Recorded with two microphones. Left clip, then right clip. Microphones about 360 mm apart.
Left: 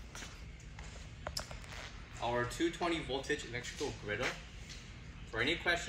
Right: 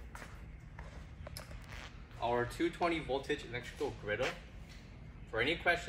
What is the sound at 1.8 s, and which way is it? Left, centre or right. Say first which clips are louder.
Speech: right 2 dB; centre.